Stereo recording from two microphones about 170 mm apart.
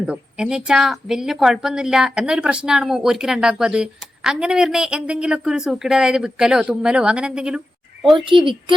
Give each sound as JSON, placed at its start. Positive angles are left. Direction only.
{"t": 0.0, "sound": "speech", "side_deg": -5}
{"t": 8.1, "sound": "a child's voice", "side_deg": -30}